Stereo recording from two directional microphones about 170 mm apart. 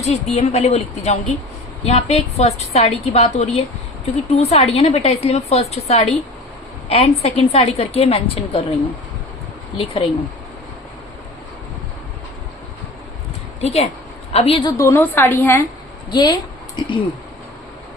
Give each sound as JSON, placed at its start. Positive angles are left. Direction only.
{"t": 0.0, "sound": "a woman's voice", "side_deg": 40}
{"t": 9.7, "sound": "a woman's voice", "side_deg": 30}
{"t": 13.6, "sound": "a woman's voice", "side_deg": 40}
{"t": 14.8, "sound": "a woman's voice", "side_deg": 15}
{"t": 16.0, "sound": "a woman's voice", "side_deg": 25}